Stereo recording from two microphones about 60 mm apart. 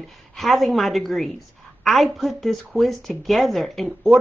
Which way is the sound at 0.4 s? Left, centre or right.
Centre.